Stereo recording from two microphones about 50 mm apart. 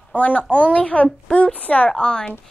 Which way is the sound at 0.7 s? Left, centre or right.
Left.